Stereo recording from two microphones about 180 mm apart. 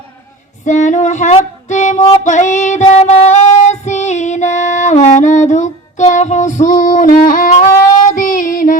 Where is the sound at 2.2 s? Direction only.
40° left (ahead or behind).